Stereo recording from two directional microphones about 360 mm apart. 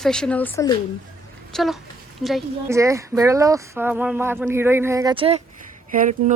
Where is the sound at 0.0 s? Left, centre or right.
Centre.